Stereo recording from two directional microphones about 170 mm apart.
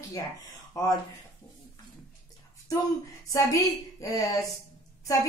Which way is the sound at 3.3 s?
20° left (ahead or behind).